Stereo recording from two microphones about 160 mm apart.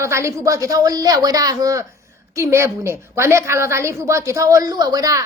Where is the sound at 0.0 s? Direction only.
15° right (ahead or behind).